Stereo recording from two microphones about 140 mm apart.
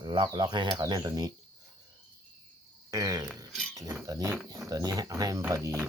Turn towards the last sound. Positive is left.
turn(degrees=-20)  # may be behind; listen again after turning